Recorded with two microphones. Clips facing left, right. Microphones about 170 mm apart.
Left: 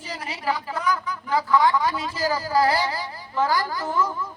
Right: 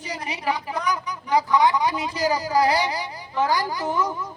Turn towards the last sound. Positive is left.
turn(degrees=-15)  # may be behind; listen again after turning